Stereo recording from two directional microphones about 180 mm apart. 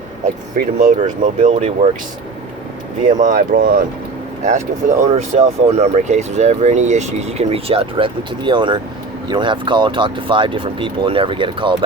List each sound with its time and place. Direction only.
0.6 s speech: 55° right (ahead or behind)
1.0 s speech: 45° right (ahead or behind)
3.1 s speech: 45° right (ahead or behind)
4.4 s speech: 40° right (ahead or behind)